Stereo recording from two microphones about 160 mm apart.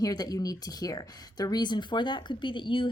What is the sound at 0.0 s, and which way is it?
A woman's voice, 25° left (ahead or behind).